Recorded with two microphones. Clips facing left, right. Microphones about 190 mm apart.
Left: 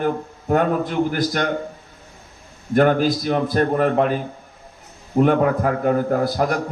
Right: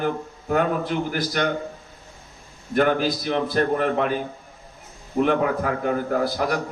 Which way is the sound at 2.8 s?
40° left (ahead or behind).